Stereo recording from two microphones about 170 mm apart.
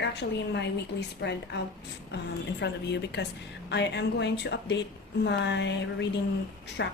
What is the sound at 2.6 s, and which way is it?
Speech, 85° left.